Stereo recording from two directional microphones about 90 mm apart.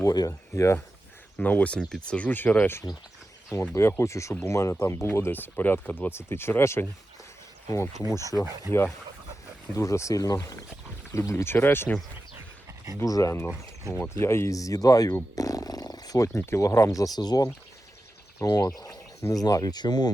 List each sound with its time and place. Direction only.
0.0 s speech: 40° left (ahead or behind)
1.4 s speech: 15° left (ahead or behind)
3.8 s speech: 30° left (ahead or behind)
7.7 s speech: 40° left (ahead or behind)
9.7 s speech: 35° left (ahead or behind)
13.1 s speech: 40° left (ahead or behind)
14.0 s speech: 25° left (ahead or behind)
15.4 s roaring cats: 40° left (ahead or behind)
16.5 s speech: 35° left (ahead or behind)